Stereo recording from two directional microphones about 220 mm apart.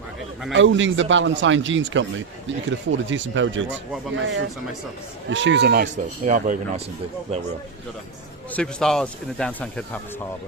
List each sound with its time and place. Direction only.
0.5 s speech: 60° right (ahead or behind); by 6.8 s 35° right (ahead or behind)
8.5 s speech: 5° left (ahead or behind)